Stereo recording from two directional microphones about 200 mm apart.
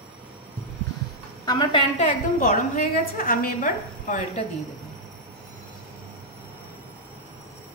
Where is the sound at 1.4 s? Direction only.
20° left (ahead or behind).